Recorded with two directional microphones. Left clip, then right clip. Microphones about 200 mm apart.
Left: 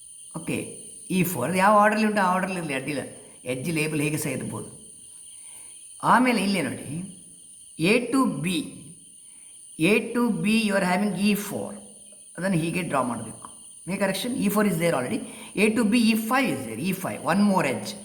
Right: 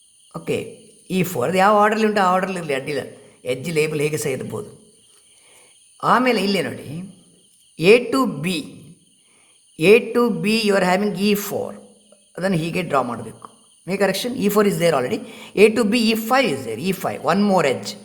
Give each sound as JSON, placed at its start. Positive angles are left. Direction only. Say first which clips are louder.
{"t": 0.3, "sound": "a man's voice", "louder": "right 7 dB", "side_deg": -45}
{"t": 6.0, "sound": "a man's voice", "louder": "right 3 dB", "side_deg": -40}
{"t": 9.7, "sound": "a man's voice", "louder": "right 9 dB", "side_deg": -50}